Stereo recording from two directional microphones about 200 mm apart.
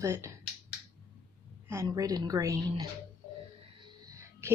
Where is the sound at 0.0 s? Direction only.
15° right (ahead or behind).